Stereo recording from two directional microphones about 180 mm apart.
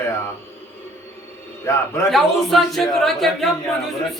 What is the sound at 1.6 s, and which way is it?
Speech, 15° left (ahead or behind).